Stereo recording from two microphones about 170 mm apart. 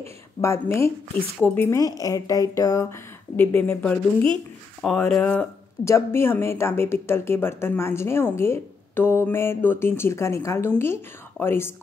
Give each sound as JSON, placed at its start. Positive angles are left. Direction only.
{"t": 0.4, "sound": "a woman's voice", "side_deg": 15}